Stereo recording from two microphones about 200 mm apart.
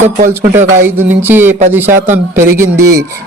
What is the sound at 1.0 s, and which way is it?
Speech, 10° right (ahead or behind).